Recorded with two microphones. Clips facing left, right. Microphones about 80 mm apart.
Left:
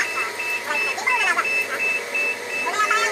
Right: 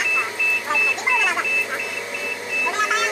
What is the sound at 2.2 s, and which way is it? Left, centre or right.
Vehicle, left.